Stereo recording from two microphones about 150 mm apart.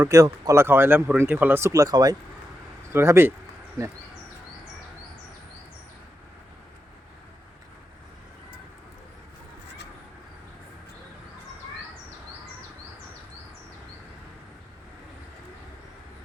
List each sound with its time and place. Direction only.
0.0 s speech: 20° right (ahead or behind)